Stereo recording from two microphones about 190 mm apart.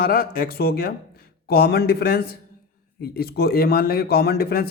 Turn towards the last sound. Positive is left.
turn(degrees=55)  # may be behind; listen again after turning